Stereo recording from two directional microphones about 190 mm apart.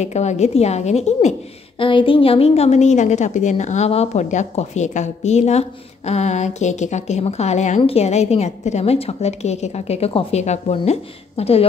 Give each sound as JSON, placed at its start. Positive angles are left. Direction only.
{"t": 0.0, "sound": "a woman's voice", "side_deg": 35}